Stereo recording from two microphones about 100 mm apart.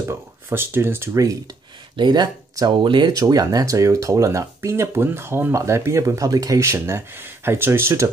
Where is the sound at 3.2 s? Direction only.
40° right (ahead or behind).